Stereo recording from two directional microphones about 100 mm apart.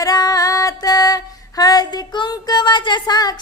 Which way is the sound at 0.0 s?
40° left (ahead or behind).